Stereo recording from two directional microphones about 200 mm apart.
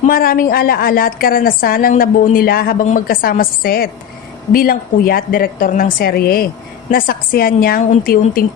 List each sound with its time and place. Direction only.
0.0 s a woman's voice: 45° left (ahead or behind)